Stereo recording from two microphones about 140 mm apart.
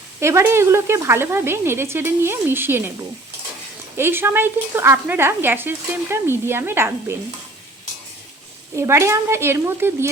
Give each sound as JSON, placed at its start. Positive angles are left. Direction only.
{"t": 0.2, "sound": "a woman's voice", "side_deg": -20}
{"t": 3.9, "sound": "a woman's voice", "side_deg": -15}
{"t": 8.7, "sound": "a woman's voice", "side_deg": -20}